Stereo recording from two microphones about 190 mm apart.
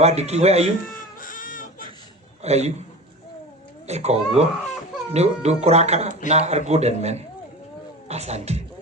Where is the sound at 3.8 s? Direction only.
35° right (ahead or behind).